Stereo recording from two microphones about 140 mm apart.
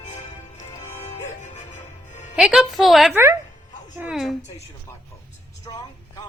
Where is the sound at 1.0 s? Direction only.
55° left (ahead or behind).